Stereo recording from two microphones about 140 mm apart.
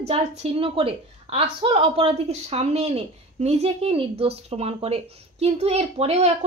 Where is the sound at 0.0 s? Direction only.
45° right (ahead or behind).